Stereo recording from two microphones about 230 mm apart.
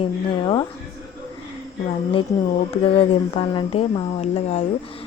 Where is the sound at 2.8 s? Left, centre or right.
Left.